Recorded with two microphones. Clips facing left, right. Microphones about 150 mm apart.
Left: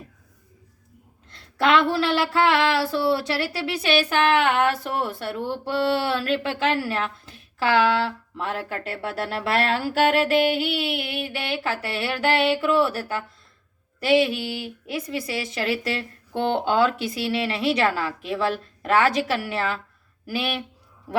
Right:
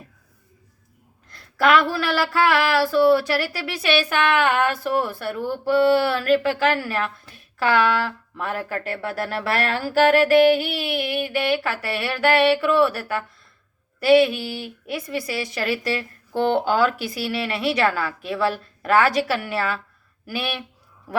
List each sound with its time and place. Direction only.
1.3 s speech: 25° left (ahead or behind)
14.4 s speech: 25° left (ahead or behind)